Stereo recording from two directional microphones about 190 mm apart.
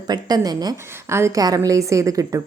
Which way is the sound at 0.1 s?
20° right (ahead or behind).